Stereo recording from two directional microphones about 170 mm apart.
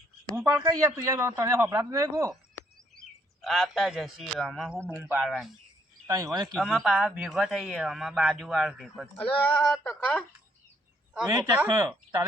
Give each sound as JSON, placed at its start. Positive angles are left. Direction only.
{"t": 0.3, "sound": "speech", "side_deg": -15}
{"t": 3.4, "sound": "speech", "side_deg": 0}
{"t": 6.1, "sound": "speech", "side_deg": -20}
{"t": 6.5, "sound": "speech", "side_deg": 0}
{"t": 11.5, "sound": "speech", "side_deg": -10}